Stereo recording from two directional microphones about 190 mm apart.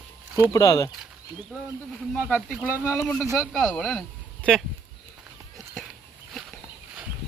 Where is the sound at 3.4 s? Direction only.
Centre (ahead or behind).